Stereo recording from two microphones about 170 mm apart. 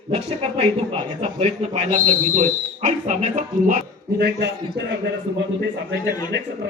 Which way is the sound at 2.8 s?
45° right (ahead or behind).